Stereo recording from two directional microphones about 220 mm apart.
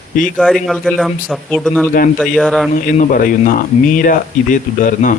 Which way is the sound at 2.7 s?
35° left (ahead or behind).